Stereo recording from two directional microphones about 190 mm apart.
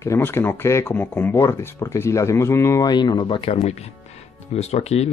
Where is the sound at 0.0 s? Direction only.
15° left (ahead or behind).